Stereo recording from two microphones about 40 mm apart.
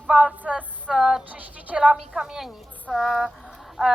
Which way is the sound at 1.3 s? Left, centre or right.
Right.